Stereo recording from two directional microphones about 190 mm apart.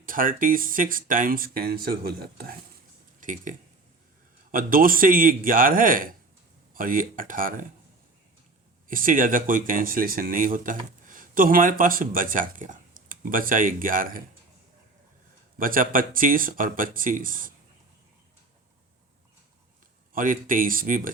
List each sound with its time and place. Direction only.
0.0 s speech: 45° right (ahead or behind)
3.2 s speech: 45° right (ahead or behind)
4.5 s speech: 50° right (ahead or behind)
8.9 s speech: 45° right (ahead or behind)
15.5 s speech: 45° right (ahead or behind)
20.1 s speech: 45° right (ahead or behind)